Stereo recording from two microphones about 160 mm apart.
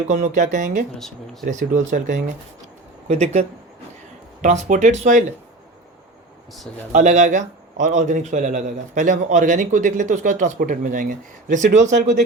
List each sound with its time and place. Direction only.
0.1 s a man's voice: 50° right (ahead or behind)
0.9 s speech: centre (ahead or behind)
1.5 s a man's voice: 50° right (ahead or behind)
6.9 s a man's voice: 50° right (ahead or behind)